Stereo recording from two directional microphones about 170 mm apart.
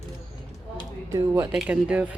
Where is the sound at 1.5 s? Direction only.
5° right (ahead or behind).